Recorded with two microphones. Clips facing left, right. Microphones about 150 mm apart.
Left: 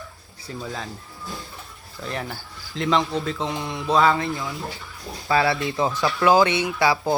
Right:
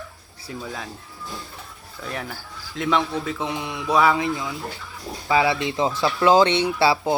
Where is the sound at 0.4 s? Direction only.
5° right (ahead or behind).